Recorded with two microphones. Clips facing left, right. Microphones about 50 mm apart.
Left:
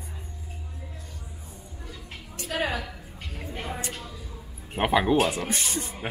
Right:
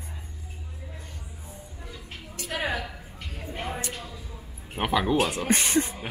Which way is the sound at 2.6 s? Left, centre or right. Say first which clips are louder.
Right 1 dB; centre.